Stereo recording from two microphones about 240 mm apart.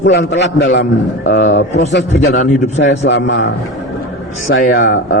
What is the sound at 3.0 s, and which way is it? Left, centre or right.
Speech, left.